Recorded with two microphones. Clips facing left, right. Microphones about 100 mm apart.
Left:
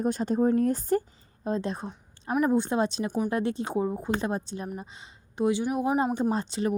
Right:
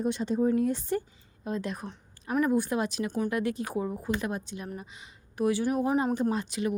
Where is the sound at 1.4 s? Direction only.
30° left (ahead or behind); by 6.0 s 15° left (ahead or behind).